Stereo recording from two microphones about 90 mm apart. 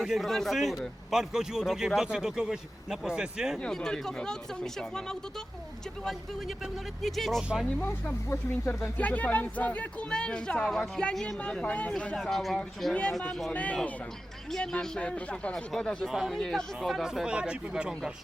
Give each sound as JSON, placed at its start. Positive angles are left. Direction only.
{"t": 0.0, "sound": "speech", "side_deg": 0}
{"t": 3.6, "sound": "a woman's voice", "side_deg": 5}
{"t": 7.0, "sound": "speech", "side_deg": 0}
{"t": 7.8, "sound": "speech", "side_deg": 20}
{"t": 8.3, "sound": "speech", "side_deg": 30}
{"t": 9.0, "sound": "a woman's voice", "side_deg": 15}
{"t": 12.9, "sound": "a woman's voice", "side_deg": 15}
{"t": 13.5, "sound": "a woman's voice", "side_deg": 15}